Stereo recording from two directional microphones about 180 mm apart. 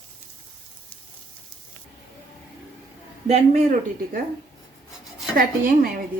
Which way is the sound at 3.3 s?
35° right (ahead or behind).